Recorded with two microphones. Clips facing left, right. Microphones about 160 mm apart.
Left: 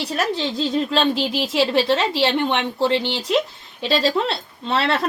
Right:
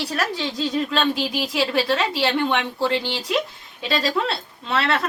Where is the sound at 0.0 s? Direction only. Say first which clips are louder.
Left 2 dB; 25° left (ahead or behind).